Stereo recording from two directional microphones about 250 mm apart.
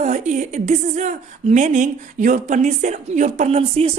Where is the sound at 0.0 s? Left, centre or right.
Right.